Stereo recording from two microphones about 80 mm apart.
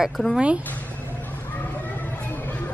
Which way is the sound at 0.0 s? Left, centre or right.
Centre.